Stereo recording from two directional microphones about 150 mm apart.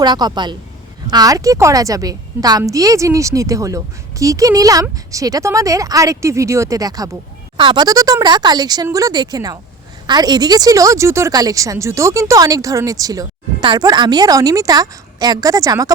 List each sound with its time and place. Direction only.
0.0 s a woman's voice: 25° right (ahead or behind)